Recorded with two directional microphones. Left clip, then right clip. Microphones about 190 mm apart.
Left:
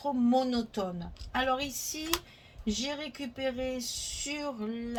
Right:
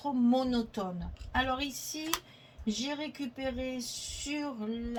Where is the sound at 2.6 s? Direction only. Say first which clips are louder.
Left 1 dB; 40° left (ahead or behind).